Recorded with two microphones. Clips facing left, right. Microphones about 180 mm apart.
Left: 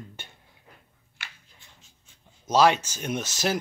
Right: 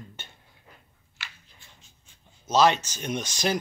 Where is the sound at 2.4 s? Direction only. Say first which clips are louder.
Left 1 dB; 10° left (ahead or behind).